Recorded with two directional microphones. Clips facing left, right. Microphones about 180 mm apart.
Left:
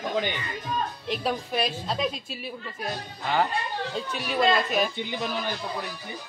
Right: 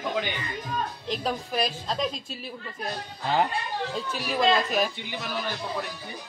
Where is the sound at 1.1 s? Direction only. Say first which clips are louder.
Left 1 dB; 5° left (ahead or behind).